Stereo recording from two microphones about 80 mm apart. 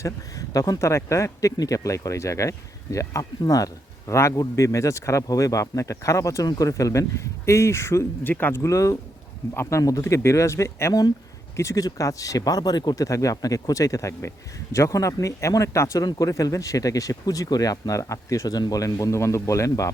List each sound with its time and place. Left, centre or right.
0.0 s speech: left
8.3 s speech: left
8.6 s speech: left
13.1 s speech: left